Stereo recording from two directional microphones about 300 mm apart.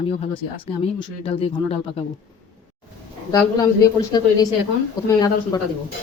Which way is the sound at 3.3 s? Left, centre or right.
Centre.